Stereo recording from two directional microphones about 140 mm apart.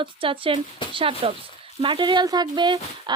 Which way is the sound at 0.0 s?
40° right (ahead or behind).